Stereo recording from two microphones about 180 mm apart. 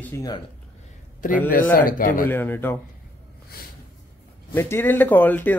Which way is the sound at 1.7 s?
50° left (ahead or behind).